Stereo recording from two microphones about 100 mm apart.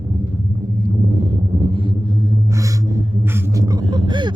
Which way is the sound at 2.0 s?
40° right (ahead or behind).